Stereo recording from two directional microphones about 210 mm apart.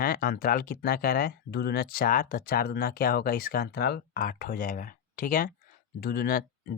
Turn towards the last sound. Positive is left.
turn(degrees=45)  # may be behind; listen again after turning